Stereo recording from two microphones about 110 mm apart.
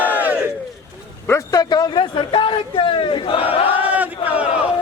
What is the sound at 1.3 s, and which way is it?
A man's voice, 35° left (ahead or behind).